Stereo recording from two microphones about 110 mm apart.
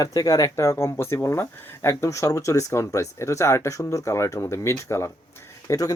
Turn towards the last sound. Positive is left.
turn(degrees=30)  # may be behind; listen again after turning